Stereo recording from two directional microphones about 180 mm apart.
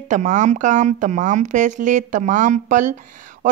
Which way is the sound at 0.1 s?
45° right (ahead or behind).